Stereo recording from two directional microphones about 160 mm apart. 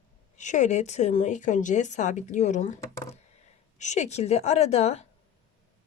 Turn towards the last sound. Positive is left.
turn(degrees=40)  # may be behind; listen again after turning